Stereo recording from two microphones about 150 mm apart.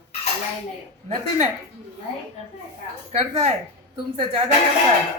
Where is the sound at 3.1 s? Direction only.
45° right (ahead or behind).